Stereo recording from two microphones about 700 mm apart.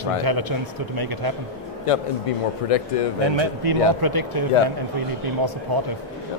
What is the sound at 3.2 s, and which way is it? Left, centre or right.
Speech, right.